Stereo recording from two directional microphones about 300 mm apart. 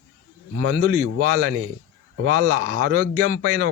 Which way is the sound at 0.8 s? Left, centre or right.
Right.